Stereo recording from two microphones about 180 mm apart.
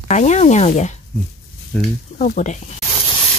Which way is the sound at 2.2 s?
45° left (ahead or behind).